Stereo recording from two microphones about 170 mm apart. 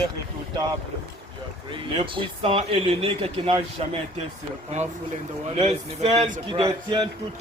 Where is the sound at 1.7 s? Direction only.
30° right (ahead or behind).